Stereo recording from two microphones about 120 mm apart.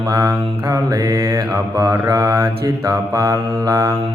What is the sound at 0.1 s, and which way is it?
Mantra, 30° right (ahead or behind).